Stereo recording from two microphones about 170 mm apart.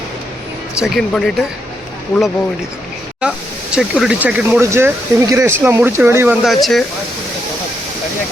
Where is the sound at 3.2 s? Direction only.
5° right (ahead or behind).